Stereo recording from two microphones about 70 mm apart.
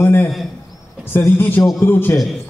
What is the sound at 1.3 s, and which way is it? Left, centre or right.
Speech, left.